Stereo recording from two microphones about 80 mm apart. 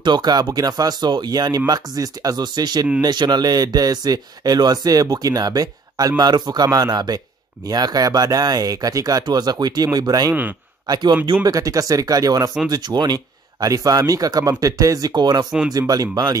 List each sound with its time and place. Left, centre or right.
0.0 s speech: right
11.4 s speech: right